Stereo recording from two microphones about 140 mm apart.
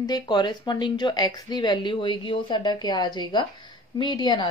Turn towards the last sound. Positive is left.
turn(degrees=30)  # may be behind; listen again after turning